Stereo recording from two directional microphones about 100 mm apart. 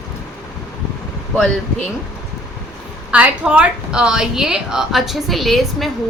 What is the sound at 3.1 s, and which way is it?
A woman's voice, 15° right (ahead or behind).